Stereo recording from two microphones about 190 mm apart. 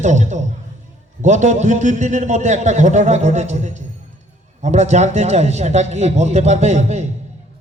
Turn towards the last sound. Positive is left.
turn(degrees=-35)  # may be behind; listen again after turning